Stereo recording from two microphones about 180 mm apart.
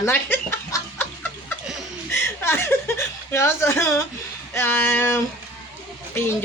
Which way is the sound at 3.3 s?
15° left (ahead or behind).